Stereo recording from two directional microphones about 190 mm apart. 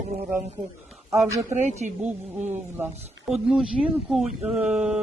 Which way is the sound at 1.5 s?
40° right (ahead or behind).